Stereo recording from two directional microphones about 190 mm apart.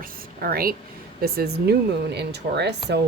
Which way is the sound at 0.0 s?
50° right (ahead or behind).